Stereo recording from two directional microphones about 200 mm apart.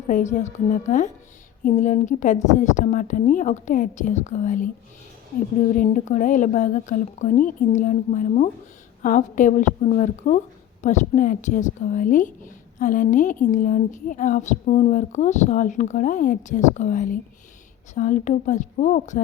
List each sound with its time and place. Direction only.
0.1 s a woman's voice: 35° left (ahead or behind)
5.7 s a woman's voice: 40° left (ahead or behind)